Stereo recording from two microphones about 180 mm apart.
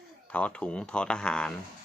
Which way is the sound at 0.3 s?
5° left (ahead or behind).